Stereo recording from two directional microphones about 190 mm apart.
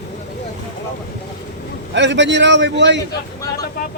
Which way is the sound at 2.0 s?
70° right (ahead or behind).